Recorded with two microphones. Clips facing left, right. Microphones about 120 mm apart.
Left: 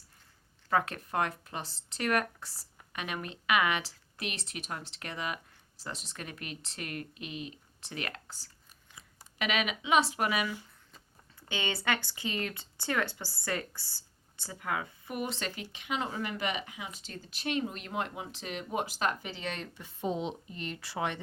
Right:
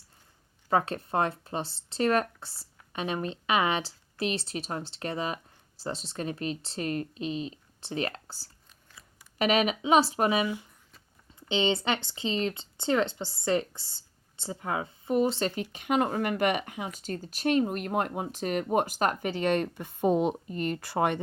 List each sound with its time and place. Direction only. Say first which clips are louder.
0.7 s speech: right 4 dB; 30° right (ahead or behind)
9.4 s speech: right 7 dB; 40° right (ahead or behind)